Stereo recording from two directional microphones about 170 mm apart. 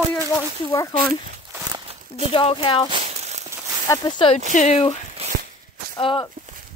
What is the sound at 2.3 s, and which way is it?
Speech, 30° left (ahead or behind).